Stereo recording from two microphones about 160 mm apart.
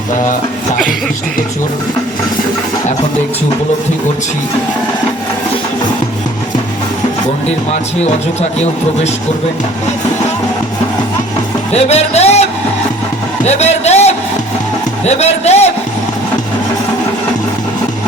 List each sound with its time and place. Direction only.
7.7 s speech: 45° left (ahead or behind)
11.7 s speech: 40° left (ahead or behind)